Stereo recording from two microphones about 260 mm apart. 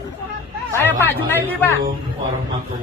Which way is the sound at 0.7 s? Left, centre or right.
Centre.